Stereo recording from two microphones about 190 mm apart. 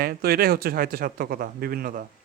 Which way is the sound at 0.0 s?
50° right (ahead or behind).